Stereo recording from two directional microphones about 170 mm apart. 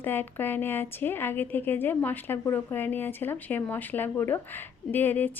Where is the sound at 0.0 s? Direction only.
10° left (ahead or behind).